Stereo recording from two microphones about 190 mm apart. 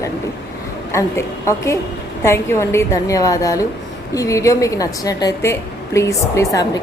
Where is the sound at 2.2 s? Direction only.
15° left (ahead or behind).